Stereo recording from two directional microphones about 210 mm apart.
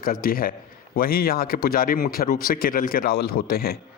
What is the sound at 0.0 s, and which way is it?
Speech, 45° left (ahead or behind).